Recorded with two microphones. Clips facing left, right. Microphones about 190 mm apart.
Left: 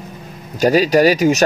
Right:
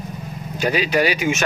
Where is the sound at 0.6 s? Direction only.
40° left (ahead or behind).